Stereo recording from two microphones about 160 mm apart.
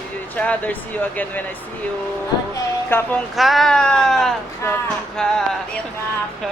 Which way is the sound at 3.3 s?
Centre (ahead or behind).